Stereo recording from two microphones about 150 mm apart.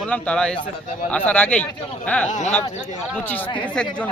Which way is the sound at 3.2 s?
10° left (ahead or behind).